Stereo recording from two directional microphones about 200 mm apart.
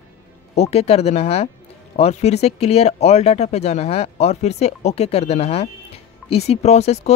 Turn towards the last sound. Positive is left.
turn(degrees=30)  # may be behind; listen again after turning